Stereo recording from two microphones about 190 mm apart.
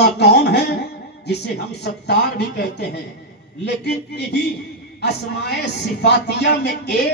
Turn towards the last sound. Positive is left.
turn(degrees=60)  # may be behind; listen again after turning